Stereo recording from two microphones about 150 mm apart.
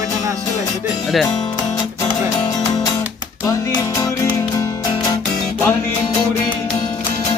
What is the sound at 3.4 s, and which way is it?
Music, 20° left (ahead or behind).